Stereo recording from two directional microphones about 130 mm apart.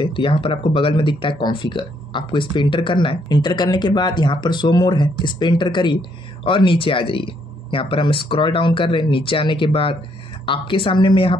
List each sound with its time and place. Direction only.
0.0 s speech: 40° left (ahead or behind)